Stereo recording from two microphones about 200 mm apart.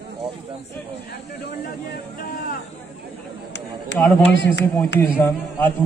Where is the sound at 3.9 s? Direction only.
60° left (ahead or behind).